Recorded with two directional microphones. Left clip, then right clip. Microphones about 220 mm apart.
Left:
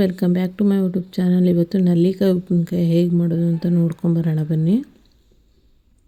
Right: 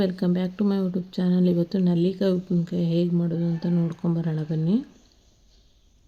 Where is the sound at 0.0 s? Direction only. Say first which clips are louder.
Left 5 dB; 30° left (ahead or behind).